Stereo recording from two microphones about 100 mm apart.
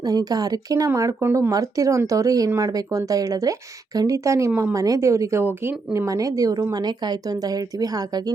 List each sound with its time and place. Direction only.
0.0 s speech: 40° right (ahead or behind)